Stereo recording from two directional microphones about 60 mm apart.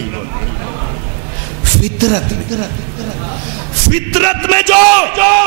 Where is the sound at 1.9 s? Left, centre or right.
Centre.